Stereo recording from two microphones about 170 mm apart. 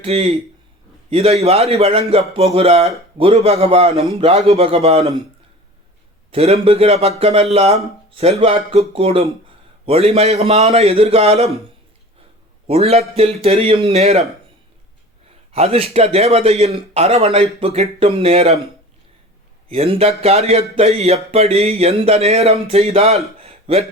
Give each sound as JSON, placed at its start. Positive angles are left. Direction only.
{"t": 0.0, "sound": "speech", "side_deg": -35}
{"t": 6.3, "sound": "speech", "side_deg": -35}
{"t": 12.6, "sound": "speech", "side_deg": -35}
{"t": 15.5, "sound": "speech", "side_deg": -35}
{"t": 19.7, "sound": "speech", "side_deg": -35}